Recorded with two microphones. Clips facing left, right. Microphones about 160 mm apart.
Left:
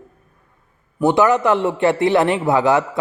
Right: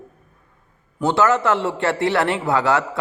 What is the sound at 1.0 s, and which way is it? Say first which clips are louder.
A man's voice: left 3 dB; 20° left (ahead or behind).